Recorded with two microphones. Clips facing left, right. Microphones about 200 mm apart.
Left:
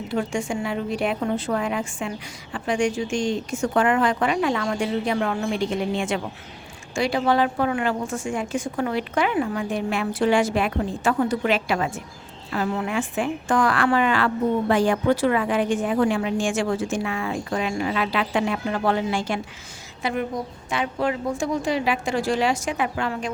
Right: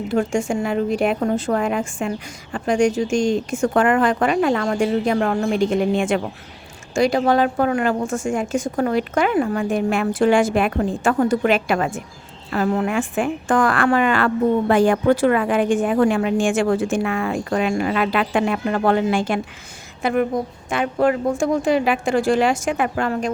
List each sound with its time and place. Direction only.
0.1 s a woman's voice: 45° right (ahead or behind)